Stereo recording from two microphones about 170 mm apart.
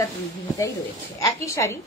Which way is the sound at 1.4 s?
15° left (ahead or behind).